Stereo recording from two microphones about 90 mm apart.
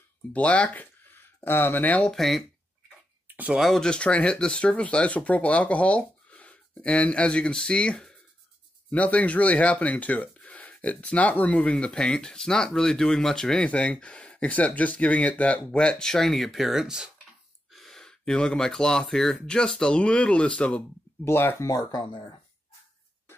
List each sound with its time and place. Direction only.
0.3 s speech: 15° left (ahead or behind)
3.5 s speech: centre (ahead or behind)
21.2 s speech: 25° left (ahead or behind)
21.6 s speech: 45° left (ahead or behind)